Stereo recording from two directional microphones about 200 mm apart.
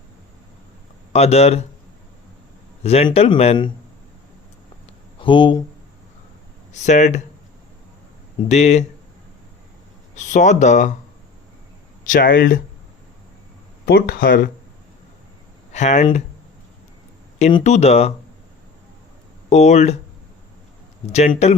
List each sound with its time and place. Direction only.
1.1 s speech: 30° left (ahead or behind)
2.8 s speech: 30° left (ahead or behind)
5.2 s speech: 25° left (ahead or behind)
6.8 s speech: 35° left (ahead or behind)
8.4 s speech: 35° left (ahead or behind)
10.2 s speech: 35° left (ahead or behind)
12.0 s speech: 45° left (ahead or behind)
13.8 s speech: 55° left (ahead or behind)
15.7 s speech: 35° left (ahead or behind)
17.4 s speech: 35° left (ahead or behind)
19.5 s speech: 35° left (ahead or behind)
21.1 s speech: 35° left (ahead or behind)